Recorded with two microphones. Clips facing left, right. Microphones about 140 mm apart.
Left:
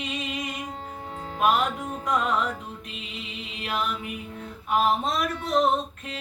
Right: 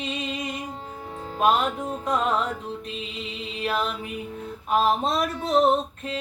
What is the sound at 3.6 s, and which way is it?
Music, 35° right (ahead or behind).